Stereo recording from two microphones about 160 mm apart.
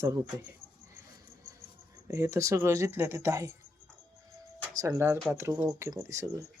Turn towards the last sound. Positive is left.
turn(degrees=-20)  # may be behind; listen again after turning